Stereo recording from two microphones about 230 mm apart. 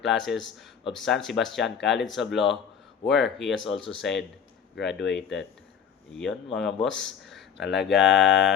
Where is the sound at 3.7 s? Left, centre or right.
Left.